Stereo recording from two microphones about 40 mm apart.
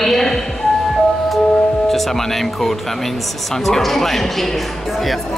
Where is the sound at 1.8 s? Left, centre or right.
Centre.